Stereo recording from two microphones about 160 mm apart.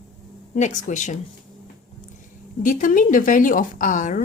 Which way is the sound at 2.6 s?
55° left (ahead or behind).